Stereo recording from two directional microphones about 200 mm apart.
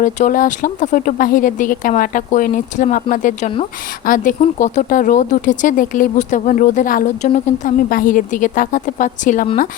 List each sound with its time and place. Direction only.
0.0 s speech: 40° left (ahead or behind)